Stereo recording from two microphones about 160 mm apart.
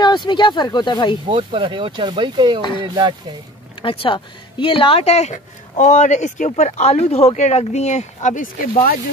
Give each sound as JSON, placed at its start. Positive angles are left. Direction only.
{"t": 0.0, "sound": "speech", "side_deg": 30}
{"t": 1.3, "sound": "speech", "side_deg": -30}
{"t": 3.8, "sound": "speech", "side_deg": 35}